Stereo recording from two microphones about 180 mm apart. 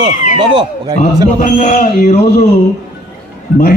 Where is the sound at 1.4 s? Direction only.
40° left (ahead or behind).